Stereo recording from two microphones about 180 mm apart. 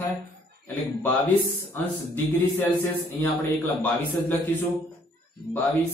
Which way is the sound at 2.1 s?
10° left (ahead or behind).